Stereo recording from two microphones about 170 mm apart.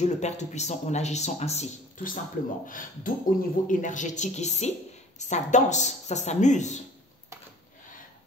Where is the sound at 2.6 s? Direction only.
55° left (ahead or behind).